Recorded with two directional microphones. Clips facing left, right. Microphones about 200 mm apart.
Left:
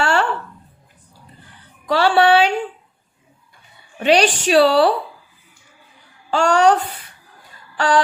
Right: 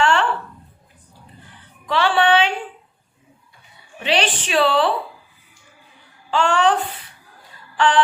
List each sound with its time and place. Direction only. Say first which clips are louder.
0.0 s a sound: even; 40° left (ahead or behind)
1.9 s a woman's voice: left 3 dB; 40° left (ahead or behind)
4.0 s a woman's voice: left 6 dB; 40° left (ahead or behind)
6.3 s a woman's voice: left 3 dB; 40° left (ahead or behind)
7.8 s a woman's voice: even; 40° left (ahead or behind)